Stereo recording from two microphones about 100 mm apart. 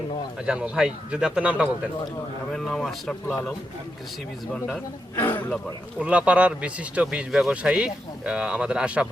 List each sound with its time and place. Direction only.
0.4 s speech: 10° right (ahead or behind)
2.5 s speech: 5° left (ahead or behind)
4.5 s speech: 5° left (ahead or behind)
5.1 s a man's voice: 20° left (ahead or behind)
6.0 s speech: 10° right (ahead or behind)